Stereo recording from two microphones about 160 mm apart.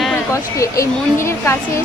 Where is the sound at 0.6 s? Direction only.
20° left (ahead or behind).